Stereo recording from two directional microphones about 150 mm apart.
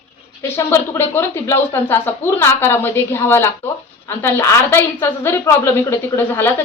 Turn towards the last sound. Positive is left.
turn(degrees=15)  # may be behind; listen again after turning